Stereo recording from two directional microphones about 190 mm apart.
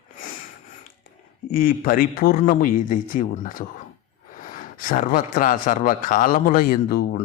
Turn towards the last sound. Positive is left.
turn(degrees=50)  # may be behind; listen again after turning